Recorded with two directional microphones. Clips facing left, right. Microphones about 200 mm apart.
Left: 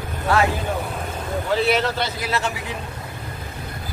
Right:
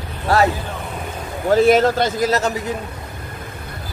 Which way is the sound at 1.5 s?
45° right (ahead or behind).